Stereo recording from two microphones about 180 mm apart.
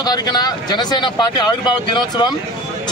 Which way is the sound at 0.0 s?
25° left (ahead or behind).